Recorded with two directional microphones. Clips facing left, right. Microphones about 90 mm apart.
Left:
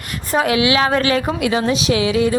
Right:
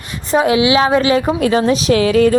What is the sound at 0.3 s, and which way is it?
Speech, 25° right (ahead or behind).